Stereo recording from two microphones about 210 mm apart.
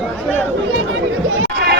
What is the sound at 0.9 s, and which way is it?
Chatter, 65° right (ahead or behind).